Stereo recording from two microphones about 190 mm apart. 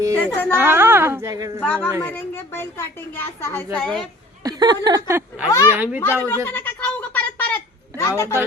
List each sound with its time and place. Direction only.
0.1 s speech: 5° left (ahead or behind)
0.5 s a woman's voice: 10° right (ahead or behind)
1.6 s a woman's voice: 10° left (ahead or behind)
4.4 s a woman's voice: 20° right (ahead or behind)
6.0 s a sound: 10° left (ahead or behind)